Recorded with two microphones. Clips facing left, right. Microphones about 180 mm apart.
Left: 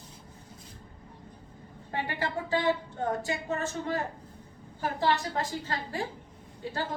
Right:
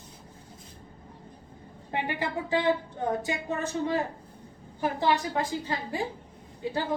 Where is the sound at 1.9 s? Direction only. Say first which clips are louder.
Right 2 dB; 15° right (ahead or behind).